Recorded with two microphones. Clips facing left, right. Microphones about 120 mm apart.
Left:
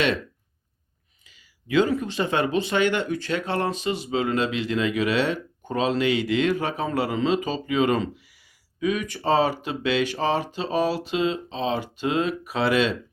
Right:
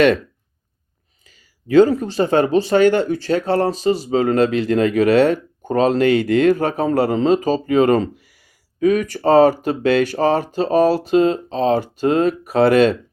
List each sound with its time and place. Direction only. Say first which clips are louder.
1.3 s speech: right 8 dB; 40° right (ahead or behind)